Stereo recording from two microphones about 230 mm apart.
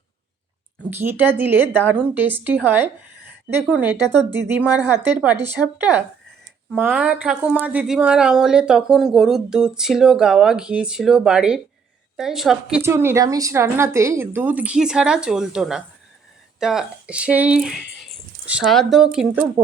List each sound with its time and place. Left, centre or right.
0.8 s a woman's voice: centre